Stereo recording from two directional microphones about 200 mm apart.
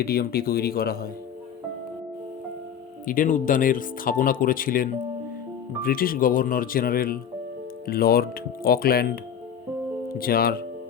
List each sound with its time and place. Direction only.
0.0 s speech: 50° left (ahead or behind)
3.1 s speech: 40° left (ahead or behind)
10.1 s speech: 50° left (ahead or behind)